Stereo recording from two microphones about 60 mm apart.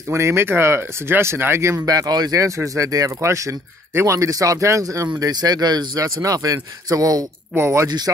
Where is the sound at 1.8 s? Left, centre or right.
Right.